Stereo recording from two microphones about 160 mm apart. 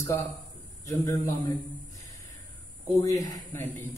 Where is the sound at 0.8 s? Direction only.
20° left (ahead or behind).